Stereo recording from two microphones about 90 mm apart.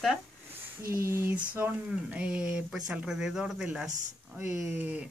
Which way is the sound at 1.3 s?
15° right (ahead or behind).